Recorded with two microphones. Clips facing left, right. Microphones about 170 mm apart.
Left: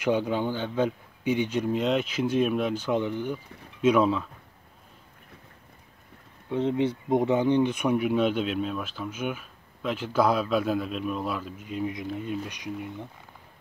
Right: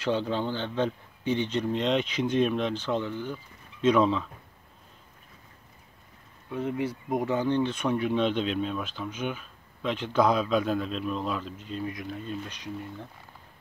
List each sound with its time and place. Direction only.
0.0 s speech: 10° left (ahead or behind)
6.5 s speech: 25° left (ahead or behind)